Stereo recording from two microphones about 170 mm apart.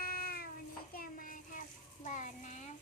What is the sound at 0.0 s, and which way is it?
Child singing, 60° left (ahead or behind).